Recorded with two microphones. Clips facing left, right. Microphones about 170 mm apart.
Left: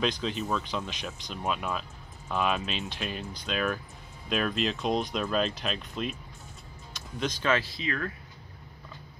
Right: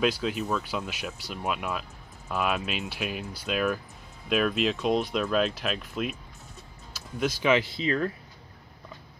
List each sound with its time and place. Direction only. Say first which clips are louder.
0.0 s speech: right 3 dB; 5° right (ahead or behind); by 8.1 s 25° right (ahead or behind)